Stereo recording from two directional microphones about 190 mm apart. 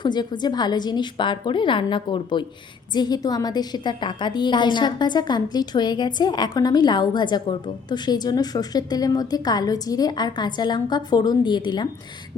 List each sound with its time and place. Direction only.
0.0 s a woman's voice: 20° left (ahead or behind)